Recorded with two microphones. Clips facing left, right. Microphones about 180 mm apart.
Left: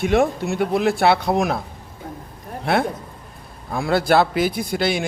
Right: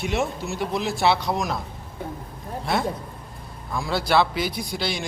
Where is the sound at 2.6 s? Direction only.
60° left (ahead or behind).